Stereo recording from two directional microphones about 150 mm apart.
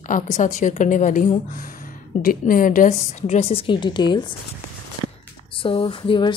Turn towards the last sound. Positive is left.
turn(degrees=35)  # may be behind; listen again after turning